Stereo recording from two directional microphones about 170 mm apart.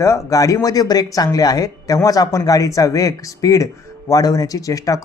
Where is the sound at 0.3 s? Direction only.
20° left (ahead or behind).